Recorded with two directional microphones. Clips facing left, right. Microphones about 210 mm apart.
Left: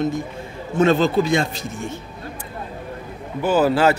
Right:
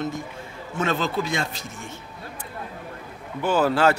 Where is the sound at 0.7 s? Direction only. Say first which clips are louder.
Left 9 dB; 30° left (ahead or behind).